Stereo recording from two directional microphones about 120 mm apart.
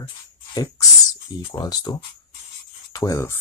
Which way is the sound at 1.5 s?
30° left (ahead or behind).